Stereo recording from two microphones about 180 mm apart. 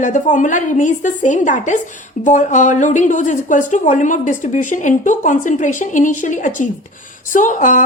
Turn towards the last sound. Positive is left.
turn(degrees=45)  # may be behind; listen again after turning